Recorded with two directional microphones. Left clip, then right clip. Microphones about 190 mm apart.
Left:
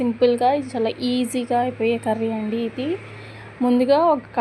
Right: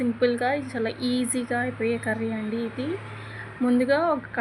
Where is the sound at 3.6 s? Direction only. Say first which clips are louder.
Left 6 dB; 20° left (ahead or behind).